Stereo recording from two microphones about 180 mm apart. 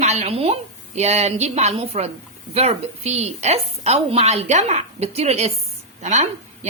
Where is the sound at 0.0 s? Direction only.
40° right (ahead or behind).